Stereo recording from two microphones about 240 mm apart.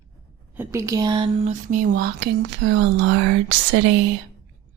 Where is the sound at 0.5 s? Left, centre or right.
Centre; by 3.1 s right.